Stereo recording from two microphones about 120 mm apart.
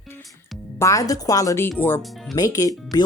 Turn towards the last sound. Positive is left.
turn(degrees=30)  # may be behind; listen again after turning